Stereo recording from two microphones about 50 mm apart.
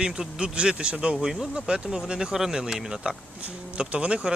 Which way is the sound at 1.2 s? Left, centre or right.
Centre.